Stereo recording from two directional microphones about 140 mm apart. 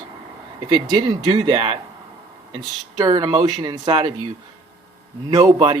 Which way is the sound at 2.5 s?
30° right (ahead or behind).